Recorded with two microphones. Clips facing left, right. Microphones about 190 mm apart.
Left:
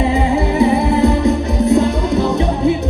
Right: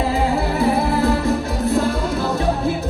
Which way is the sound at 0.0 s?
Centre (ahead or behind).